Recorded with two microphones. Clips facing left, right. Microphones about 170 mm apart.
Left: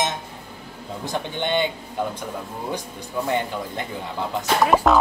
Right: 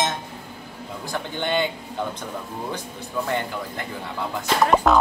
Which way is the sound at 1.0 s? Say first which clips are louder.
Left 1 dB; 20° left (ahead or behind).